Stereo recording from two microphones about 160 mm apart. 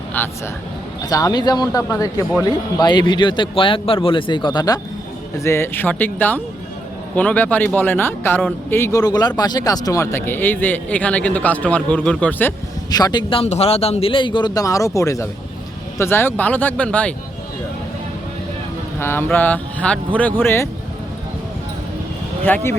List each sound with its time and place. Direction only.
0.1 s speech: 10° left (ahead or behind)
1.1 s speech: 25° left (ahead or behind)
12.9 s speech: 25° left (ahead or behind)
13.4 s speech: 40° left (ahead or behind); by 17.2 s 10° left (ahead or behind)
18.9 s speech: 15° left (ahead or behind)
22.4 s speech: 10° left (ahead or behind)